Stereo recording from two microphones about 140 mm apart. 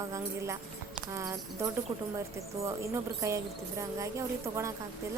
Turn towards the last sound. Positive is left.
turn(degrees=-20)  # may be behind; listen again after turning